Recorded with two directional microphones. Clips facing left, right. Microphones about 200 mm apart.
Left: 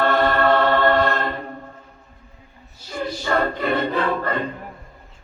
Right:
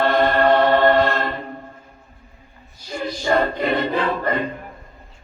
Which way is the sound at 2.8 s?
15° right (ahead or behind).